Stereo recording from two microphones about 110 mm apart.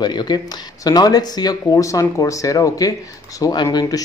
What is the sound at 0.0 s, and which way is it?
Speech, 40° left (ahead or behind).